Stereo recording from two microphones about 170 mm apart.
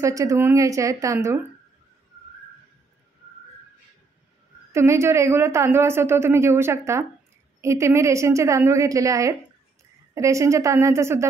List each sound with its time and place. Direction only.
0.0 s a woman's voice: 20° right (ahead or behind)
4.7 s a woman's voice: 15° right (ahead or behind)